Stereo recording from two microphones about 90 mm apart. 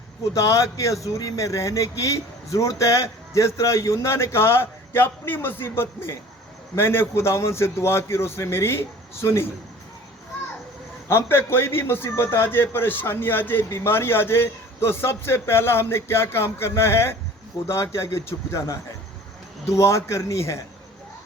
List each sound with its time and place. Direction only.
0.3 s a man's voice: 35° left (ahead or behind)
11.1 s a man's voice: 25° left (ahead or behind)